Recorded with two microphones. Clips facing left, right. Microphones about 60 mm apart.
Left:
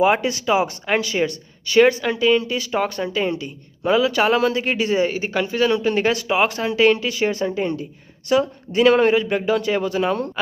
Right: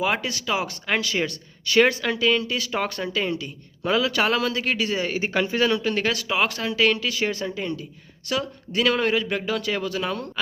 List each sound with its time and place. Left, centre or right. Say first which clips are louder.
0.0 s speech: left 7 dB; centre
4.4 s speech: left 5 dB; centre
5.1 s speech: left 1 dB; centre
5.7 s speech: left 5 dB; centre